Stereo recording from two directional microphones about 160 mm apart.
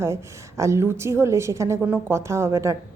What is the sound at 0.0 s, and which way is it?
A woman's voice, 15° right (ahead or behind).